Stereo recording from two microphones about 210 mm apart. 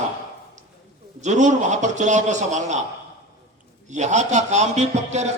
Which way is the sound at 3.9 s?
35° right (ahead or behind).